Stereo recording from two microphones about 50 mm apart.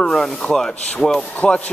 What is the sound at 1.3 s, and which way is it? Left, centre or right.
Speech, left.